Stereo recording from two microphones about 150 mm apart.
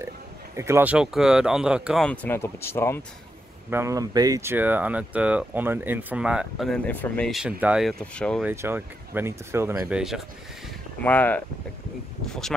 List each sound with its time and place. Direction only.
0.6 s speech: 15° right (ahead or behind)
2.0 s speech: 15° left (ahead or behind)
3.7 s speech: 20° right (ahead or behind); by 7.2 s 10° left (ahead or behind)
7.2 s speech: 5° right (ahead or behind)
8.0 s speech: 5° left (ahead or behind)
8.5 s speech: 15° right (ahead or behind)
9.9 s speech: centre (ahead or behind)
11.1 s speech: 10° left (ahead or behind)